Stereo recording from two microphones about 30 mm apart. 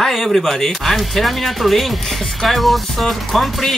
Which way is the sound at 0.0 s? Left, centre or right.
Centre.